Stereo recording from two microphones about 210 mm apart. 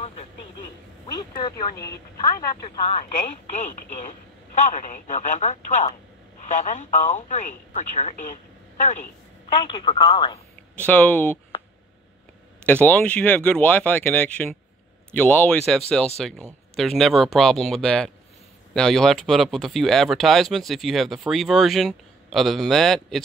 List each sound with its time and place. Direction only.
1.1 s speech: 20° left (ahead or behind)
3.5 s speech: 35° left (ahead or behind)
9.7 s speech: 25° left (ahead or behind)
10.9 s speech: 5° left (ahead or behind)
12.8 s speech: 5° left (ahead or behind)